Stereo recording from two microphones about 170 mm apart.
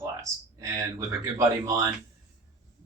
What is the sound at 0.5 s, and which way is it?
Speech, 20° right (ahead or behind).